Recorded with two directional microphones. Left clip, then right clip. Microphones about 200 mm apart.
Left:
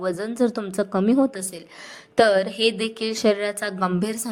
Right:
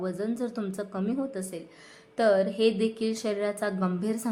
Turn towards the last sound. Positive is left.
turn(degrees=45)  # may be behind; listen again after turning